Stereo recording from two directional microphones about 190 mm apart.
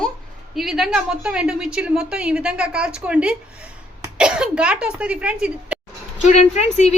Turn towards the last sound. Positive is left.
turn(degrees=35)  # may be behind; listen again after turning